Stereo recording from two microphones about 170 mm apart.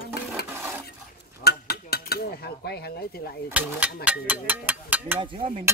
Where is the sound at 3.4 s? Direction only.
10° right (ahead or behind).